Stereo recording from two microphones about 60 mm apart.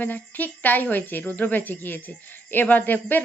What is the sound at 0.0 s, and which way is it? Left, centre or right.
Speech, left.